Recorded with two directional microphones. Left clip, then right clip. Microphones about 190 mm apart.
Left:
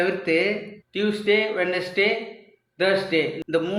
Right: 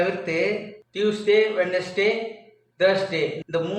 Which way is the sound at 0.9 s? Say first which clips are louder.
Right 2 dB; 45° left (ahead or behind).